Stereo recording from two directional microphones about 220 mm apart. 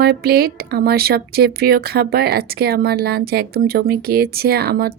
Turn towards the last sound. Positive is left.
turn(degrees=-45)  # may be behind; listen again after turning